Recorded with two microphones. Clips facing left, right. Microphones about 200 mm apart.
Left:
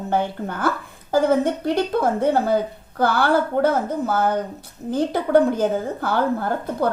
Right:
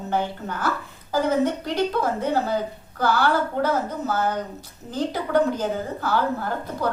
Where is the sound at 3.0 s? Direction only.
55° left (ahead or behind).